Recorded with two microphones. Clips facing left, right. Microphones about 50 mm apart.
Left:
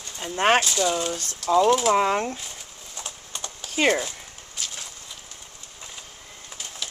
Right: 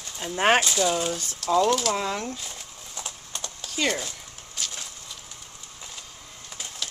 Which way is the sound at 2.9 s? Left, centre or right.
Centre.